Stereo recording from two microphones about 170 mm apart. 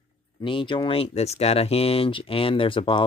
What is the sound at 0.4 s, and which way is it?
Speech, 30° left (ahead or behind).